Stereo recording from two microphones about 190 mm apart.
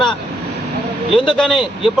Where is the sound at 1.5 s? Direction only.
25° left (ahead or behind).